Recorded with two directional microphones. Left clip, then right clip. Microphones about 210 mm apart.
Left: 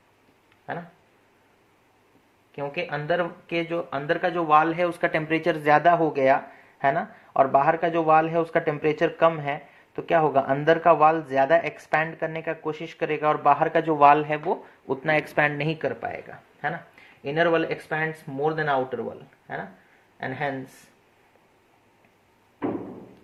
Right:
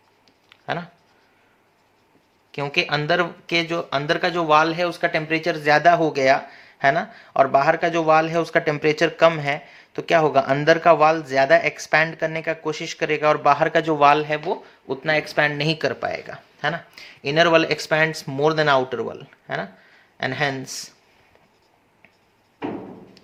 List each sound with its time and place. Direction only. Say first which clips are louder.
2.5 s speech: right 7 dB; 45° right (ahead or behind); by 15.9 s 20° right (ahead or behind)
15.9 s speech: right 5 dB; 35° right (ahead or behind)
20.1 s speech: right 6 dB; 45° right (ahead or behind)